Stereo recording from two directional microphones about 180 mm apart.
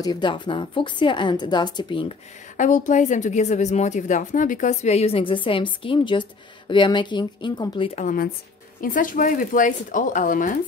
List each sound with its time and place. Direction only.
0.0 s a woman's voice: 25° left (ahead or behind)
2.5 s a woman's voice: 45° left (ahead or behind); by 8.0 s 25° left (ahead or behind)
8.0 s speech: 50° left (ahead or behind)